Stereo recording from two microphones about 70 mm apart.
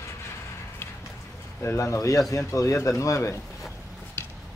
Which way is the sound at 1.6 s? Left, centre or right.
Left.